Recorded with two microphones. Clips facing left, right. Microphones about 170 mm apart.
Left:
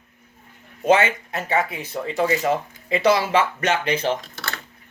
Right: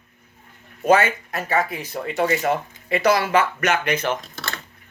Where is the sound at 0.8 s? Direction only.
20° left (ahead or behind).